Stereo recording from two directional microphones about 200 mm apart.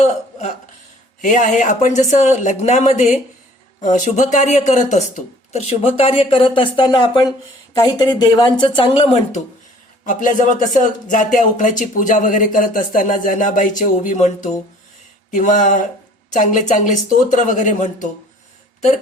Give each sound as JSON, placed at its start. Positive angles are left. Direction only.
{"t": 0.0, "sound": "a sound", "side_deg": 35}
{"t": 1.2, "sound": "speech", "side_deg": 40}
{"t": 10.1, "sound": "speech", "side_deg": 40}
{"t": 15.3, "sound": "speech", "side_deg": 40}